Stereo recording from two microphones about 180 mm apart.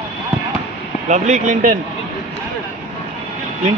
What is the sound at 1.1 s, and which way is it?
Speech, 45° right (ahead or behind).